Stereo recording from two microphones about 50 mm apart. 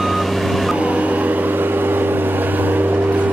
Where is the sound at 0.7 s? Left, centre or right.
Right.